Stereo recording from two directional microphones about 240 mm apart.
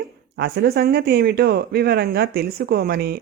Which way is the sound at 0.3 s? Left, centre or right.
Right.